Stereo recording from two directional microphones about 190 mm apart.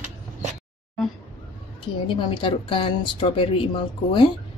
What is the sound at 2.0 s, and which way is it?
Speech, 25° left (ahead or behind).